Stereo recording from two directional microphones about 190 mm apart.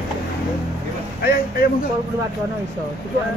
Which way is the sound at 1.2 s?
55° left (ahead or behind).